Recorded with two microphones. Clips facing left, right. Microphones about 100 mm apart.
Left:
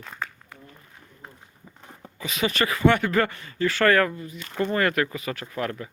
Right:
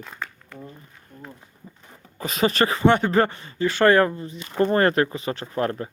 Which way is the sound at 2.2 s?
40° right (ahead or behind).